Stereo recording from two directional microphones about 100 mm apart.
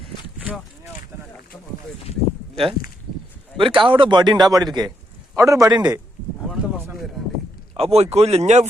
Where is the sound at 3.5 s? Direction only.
60° right (ahead or behind); by 5.8 s 40° right (ahead or behind).